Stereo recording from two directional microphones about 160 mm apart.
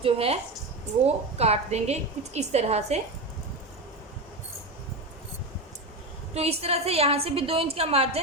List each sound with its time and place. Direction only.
0.0 s a woman's voice: 35° right (ahead or behind)
6.3 s a woman's voice: 40° right (ahead or behind)